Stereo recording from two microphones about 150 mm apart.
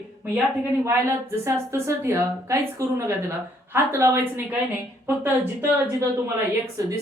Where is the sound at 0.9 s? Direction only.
15° right (ahead or behind).